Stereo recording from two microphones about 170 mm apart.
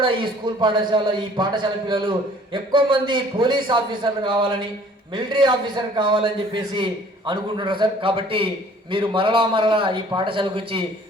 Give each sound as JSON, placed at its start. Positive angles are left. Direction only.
{"t": 0.0, "sound": "a man's voice", "side_deg": -30}